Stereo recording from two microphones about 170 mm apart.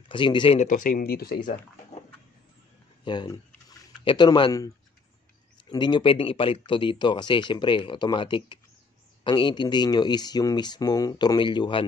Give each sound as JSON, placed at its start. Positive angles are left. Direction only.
{"t": 0.1, "sound": "speech", "side_deg": 30}
{"t": 0.6, "sound": "speech", "side_deg": 50}
{"t": 3.1, "sound": "speech", "side_deg": 25}
{"t": 5.7, "sound": "speech", "side_deg": 25}